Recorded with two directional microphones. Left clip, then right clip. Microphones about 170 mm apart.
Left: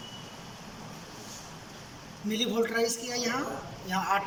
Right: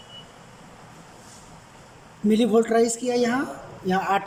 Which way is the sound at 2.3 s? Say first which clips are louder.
Right 9 dB; 50° right (ahead or behind).